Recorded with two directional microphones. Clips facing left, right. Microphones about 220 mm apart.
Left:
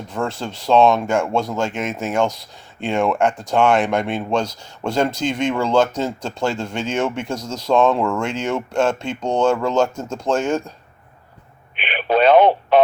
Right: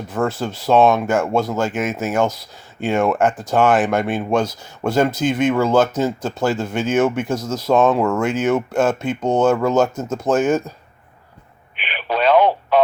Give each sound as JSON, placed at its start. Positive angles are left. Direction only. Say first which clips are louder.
{"t": 0.1, "sound": "speech", "louder": "right 4 dB", "side_deg": -5}
{"t": 11.8, "sound": "radio", "louder": "left 4 dB", "side_deg": 20}
{"t": 12.2, "sound": "speech", "louder": "left 1 dB", "side_deg": 25}